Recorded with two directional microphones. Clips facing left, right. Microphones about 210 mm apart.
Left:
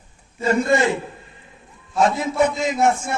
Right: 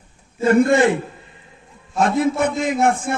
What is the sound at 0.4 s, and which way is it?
Speech, 55° right (ahead or behind).